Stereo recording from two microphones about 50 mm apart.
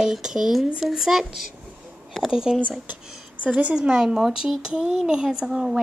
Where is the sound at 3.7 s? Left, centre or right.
Centre.